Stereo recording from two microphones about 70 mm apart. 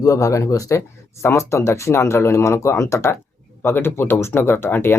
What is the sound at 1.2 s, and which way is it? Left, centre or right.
Speech, left.